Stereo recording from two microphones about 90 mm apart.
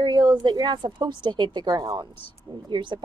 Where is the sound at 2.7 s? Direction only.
60° right (ahead or behind).